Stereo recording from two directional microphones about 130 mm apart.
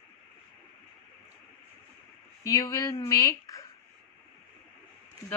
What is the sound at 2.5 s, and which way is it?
Speech, 25° left (ahead or behind).